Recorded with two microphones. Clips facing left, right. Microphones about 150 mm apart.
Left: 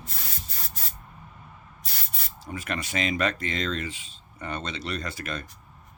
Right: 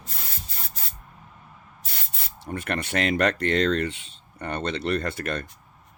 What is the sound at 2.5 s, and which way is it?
Speech, 65° right (ahead or behind).